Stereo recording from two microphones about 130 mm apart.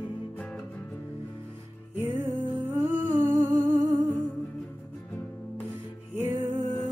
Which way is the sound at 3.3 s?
30° right (ahead or behind).